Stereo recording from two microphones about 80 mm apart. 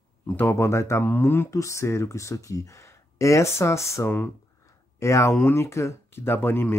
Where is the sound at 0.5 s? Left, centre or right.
Left.